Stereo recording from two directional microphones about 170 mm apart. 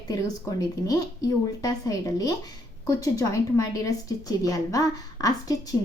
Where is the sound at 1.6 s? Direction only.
20° left (ahead or behind).